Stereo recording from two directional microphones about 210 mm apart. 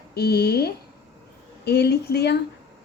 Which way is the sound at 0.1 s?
50° left (ahead or behind).